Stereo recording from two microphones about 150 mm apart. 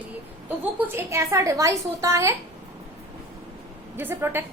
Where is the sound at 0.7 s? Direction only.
15° right (ahead or behind).